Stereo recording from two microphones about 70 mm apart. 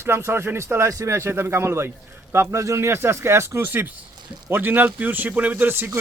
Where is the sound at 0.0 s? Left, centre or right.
Right.